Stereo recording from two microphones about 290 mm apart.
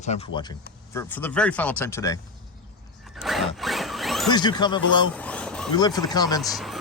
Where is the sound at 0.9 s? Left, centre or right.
Centre.